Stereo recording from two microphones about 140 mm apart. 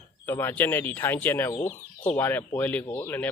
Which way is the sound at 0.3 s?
15° left (ahead or behind).